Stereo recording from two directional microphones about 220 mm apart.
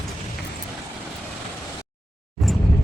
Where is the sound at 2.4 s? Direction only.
Centre (ahead or behind).